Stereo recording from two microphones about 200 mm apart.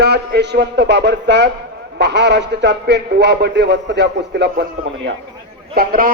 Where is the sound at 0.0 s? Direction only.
55° right (ahead or behind).